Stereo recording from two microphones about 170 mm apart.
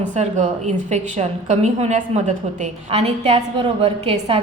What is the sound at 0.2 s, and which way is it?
A woman's voice, 45° right (ahead or behind).